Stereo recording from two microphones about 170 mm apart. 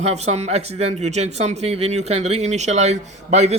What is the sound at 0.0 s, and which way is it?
Speech, 40° right (ahead or behind).